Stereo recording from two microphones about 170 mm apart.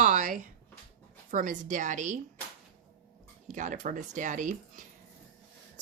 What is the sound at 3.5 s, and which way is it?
A woman's voice, 45° right (ahead or behind).